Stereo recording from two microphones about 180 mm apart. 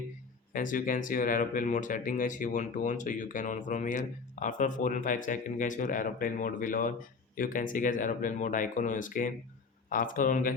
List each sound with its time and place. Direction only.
0.5 s speech: 50° left (ahead or behind)